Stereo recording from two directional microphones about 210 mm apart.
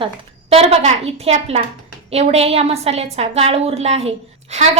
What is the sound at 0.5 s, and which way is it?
A woman's voice, 30° right (ahead or behind).